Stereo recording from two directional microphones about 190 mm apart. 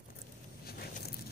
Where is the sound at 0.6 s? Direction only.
50° left (ahead or behind).